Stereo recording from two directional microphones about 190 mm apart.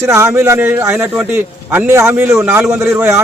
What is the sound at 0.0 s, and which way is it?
A man's voice, 15° right (ahead or behind).